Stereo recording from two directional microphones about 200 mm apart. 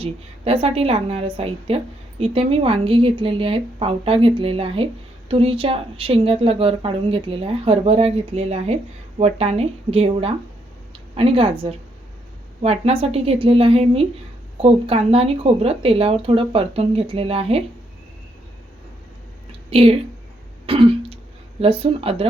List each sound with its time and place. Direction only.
0.0 s a woman's voice: 30° right (ahead or behind)
12.6 s a woman's voice: 30° right (ahead or behind)
19.5 s a sound: 30° right (ahead or behind)
20.7 s throat clearing: 25° right (ahead or behind)
21.6 s a woman's voice: 30° right (ahead or behind)